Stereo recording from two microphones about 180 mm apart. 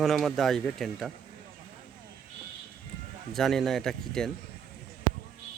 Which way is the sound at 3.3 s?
Centre (ahead or behind).